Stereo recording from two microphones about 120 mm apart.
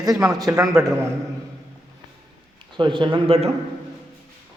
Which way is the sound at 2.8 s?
40° right (ahead or behind).